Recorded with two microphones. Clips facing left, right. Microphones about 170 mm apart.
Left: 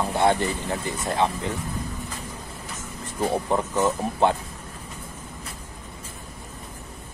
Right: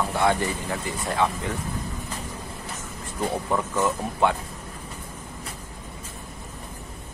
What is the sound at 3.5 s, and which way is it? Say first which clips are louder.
Speech: left 2 dB; 25° left (ahead or behind).